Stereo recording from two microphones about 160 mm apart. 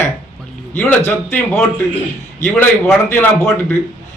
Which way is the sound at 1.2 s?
10° left (ahead or behind).